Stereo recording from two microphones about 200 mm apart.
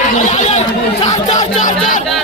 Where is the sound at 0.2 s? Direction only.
35° left (ahead or behind).